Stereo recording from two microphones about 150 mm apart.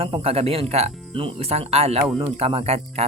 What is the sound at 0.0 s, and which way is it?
Speech, 40° right (ahead or behind).